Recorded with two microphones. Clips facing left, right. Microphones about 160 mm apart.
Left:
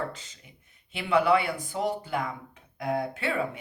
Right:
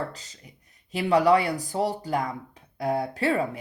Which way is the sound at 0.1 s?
40° right (ahead or behind).